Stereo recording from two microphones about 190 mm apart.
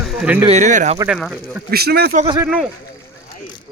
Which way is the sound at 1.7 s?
55° right (ahead or behind).